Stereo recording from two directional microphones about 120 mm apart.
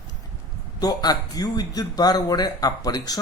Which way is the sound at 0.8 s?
35° left (ahead or behind).